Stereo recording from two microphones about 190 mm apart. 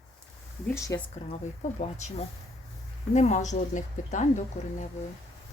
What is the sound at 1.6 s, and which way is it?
Speech, 35° left (ahead or behind).